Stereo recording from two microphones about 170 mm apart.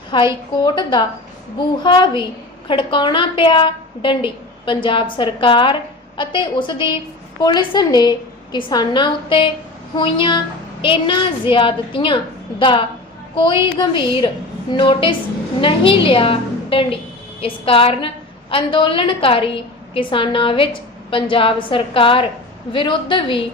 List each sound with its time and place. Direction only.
0.1 s a woman's voice: 30° left (ahead or behind)